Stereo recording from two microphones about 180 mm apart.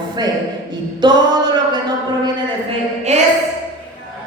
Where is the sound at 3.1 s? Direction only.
40° right (ahead or behind).